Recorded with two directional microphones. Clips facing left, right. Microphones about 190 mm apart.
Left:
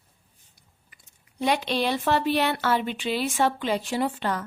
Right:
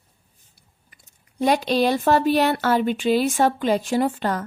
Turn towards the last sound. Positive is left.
turn(degrees=-45)  # may be behind; listen again after turning